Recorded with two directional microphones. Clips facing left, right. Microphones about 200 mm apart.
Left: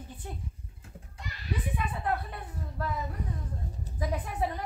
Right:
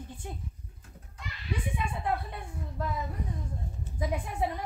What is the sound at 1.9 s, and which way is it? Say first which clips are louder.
Speech: even; 15° right (ahead or behind).